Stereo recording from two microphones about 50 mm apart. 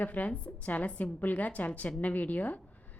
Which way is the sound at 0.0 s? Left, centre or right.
Left.